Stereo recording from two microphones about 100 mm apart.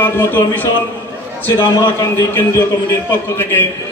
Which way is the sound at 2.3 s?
25° left (ahead or behind).